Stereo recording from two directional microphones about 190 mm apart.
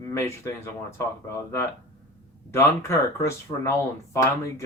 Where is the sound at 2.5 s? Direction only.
15° left (ahead or behind).